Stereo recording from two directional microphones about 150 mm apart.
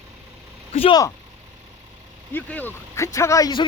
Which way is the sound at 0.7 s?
40° left (ahead or behind).